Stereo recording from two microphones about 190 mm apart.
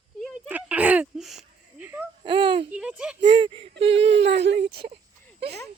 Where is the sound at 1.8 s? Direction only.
10° right (ahead or behind).